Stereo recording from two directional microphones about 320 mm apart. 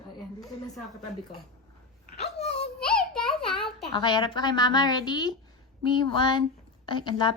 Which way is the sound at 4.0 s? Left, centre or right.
Centre.